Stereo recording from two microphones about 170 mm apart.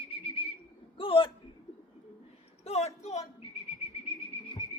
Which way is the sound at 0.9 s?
30° left (ahead or behind).